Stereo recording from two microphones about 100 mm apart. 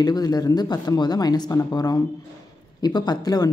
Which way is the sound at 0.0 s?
40° left (ahead or behind).